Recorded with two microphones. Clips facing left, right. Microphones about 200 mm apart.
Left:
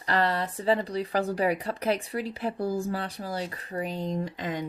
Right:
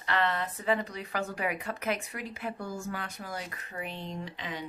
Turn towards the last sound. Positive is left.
turn(degrees=45)  # may be behind; listen again after turning